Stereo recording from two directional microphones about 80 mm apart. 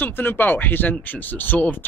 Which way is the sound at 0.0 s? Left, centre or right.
Left.